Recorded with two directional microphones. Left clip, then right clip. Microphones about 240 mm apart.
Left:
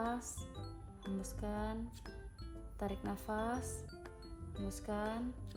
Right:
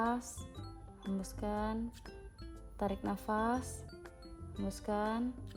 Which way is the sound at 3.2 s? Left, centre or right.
Right.